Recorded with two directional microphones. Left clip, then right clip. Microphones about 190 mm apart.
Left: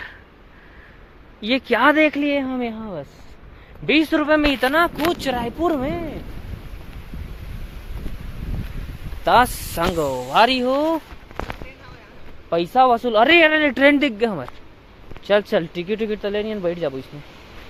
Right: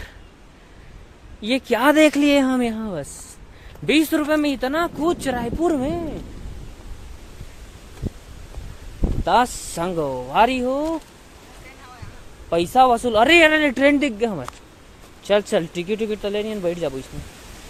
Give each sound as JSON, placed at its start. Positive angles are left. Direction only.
{"t": 1.4, "sound": "speech", "side_deg": -20}
{"t": 3.8, "sound": "speech", "side_deg": -20}
{"t": 5.2, "sound": "speech", "side_deg": -30}
{"t": 9.2, "sound": "speech", "side_deg": -15}
{"t": 9.9, "sound": "speech", "side_deg": 0}
{"t": 12.5, "sound": "speech", "side_deg": -25}
{"t": 13.7, "sound": "speech", "side_deg": -10}